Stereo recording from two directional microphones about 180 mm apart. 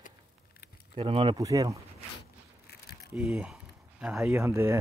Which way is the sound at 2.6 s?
60° left (ahead or behind).